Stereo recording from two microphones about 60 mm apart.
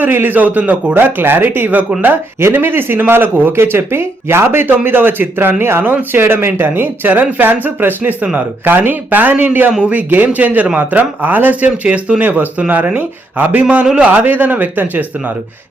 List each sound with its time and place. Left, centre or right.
0.0 s a man's voice: right; by 0.9 s centre
0.9 s a man's voice: right
2.4 s a man's voice: right
7.1 s a man's voice: right
14.1 s speech: right